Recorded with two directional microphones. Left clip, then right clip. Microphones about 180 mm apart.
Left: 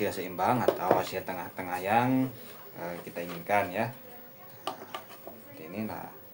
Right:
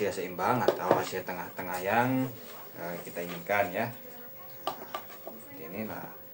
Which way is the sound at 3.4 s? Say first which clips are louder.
Left 1 dB; 40° left (ahead or behind).